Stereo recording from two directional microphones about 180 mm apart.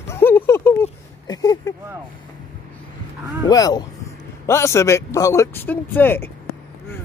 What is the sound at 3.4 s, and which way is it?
Speech, 20° left (ahead or behind).